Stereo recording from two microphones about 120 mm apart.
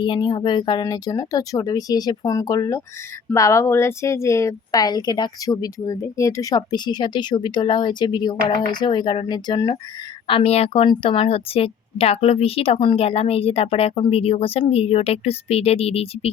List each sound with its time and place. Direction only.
0.0 s speech: 40° left (ahead or behind)
10.2 s a woman's voice: 55° left (ahead or behind)
10.8 s a woman's voice: 50° left (ahead or behind)